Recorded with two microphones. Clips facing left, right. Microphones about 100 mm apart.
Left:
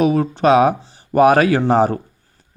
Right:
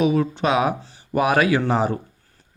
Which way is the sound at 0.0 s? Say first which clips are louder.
Left 4 dB; 45° left (ahead or behind).